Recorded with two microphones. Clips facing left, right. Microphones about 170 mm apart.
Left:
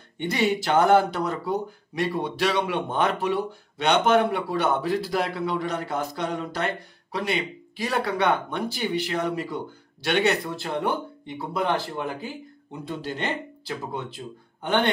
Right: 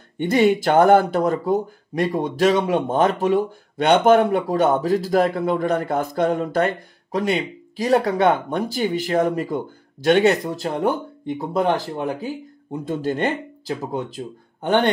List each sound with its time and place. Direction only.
0.2 s speech: 50° right (ahead or behind)